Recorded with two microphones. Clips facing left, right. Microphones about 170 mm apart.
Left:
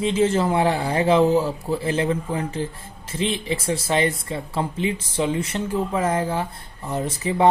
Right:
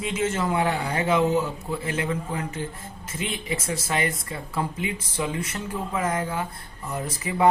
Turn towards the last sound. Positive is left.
turn(degrees=25)  # may be behind; listen again after turning